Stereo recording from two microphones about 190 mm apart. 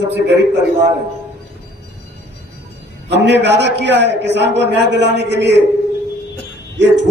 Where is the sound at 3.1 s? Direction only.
65° right (ahead or behind).